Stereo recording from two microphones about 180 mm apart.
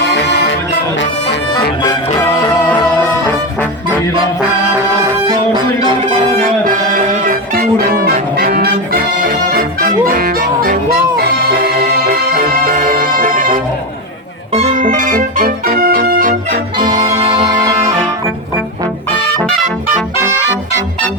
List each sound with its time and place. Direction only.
0.0 s music: 70° left (ahead or behind)
1.5 s music: 20° left (ahead or behind)
7.3 s music: 55° right (ahead or behind)
14.5 s music: 40° right (ahead or behind); by 17.9 s 20° right (ahead or behind)